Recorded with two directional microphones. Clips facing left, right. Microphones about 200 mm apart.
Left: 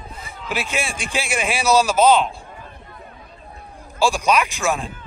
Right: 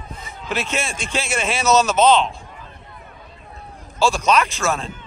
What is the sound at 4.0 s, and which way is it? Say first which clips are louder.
Speech: right 1 dB; 15° left (ahead or behind).